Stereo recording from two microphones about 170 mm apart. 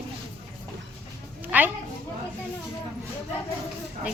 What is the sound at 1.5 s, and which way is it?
Speech, 10° right (ahead or behind).